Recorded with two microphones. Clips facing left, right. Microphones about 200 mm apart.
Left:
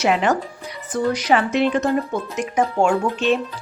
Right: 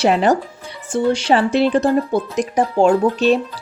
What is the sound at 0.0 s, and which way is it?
Speech, 35° right (ahead or behind).